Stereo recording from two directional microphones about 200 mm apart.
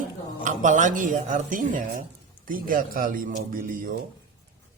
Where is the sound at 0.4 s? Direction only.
40° right (ahead or behind).